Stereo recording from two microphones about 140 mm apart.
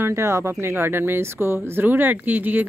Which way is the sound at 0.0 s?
20° right (ahead or behind).